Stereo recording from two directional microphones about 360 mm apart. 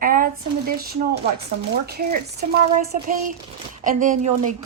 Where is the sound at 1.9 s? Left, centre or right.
Right.